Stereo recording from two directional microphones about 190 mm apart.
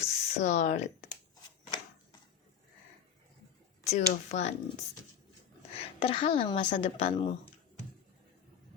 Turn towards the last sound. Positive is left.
turn(degrees=30)  # may be behind; listen again after turning